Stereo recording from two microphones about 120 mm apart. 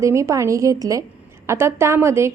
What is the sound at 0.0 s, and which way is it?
A woman's voice, 25° right (ahead or behind).